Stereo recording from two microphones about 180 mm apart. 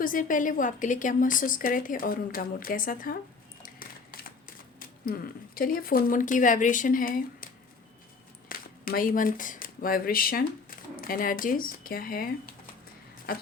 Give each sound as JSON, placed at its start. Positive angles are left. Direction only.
{"t": 0.0, "sound": "a woman's voice", "side_deg": 50}
{"t": 3.6, "sound": "a sound", "side_deg": 55}
{"t": 8.4, "sound": "speech", "side_deg": 50}